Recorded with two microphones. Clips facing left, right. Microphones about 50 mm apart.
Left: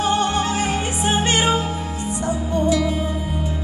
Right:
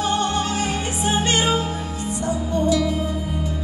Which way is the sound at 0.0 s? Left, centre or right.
Left.